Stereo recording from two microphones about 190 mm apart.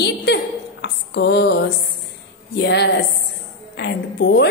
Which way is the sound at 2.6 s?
65° left (ahead or behind).